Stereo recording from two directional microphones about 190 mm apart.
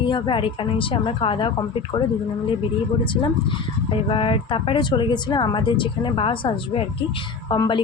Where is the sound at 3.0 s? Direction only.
25° left (ahead or behind).